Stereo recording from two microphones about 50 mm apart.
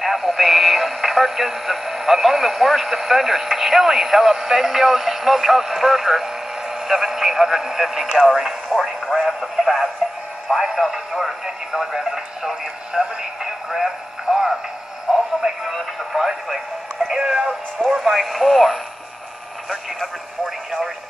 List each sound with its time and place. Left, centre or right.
0.0 s speech: centre
15.1 s radio: centre
15.7 s music: centre
17.5 s speech: centre